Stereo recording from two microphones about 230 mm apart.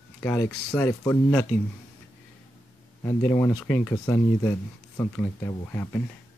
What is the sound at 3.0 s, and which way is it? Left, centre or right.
Speech, centre.